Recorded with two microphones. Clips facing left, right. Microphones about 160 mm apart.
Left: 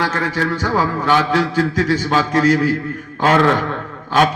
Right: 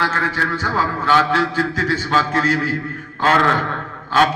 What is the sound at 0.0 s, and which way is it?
A man's voice, 15° left (ahead or behind).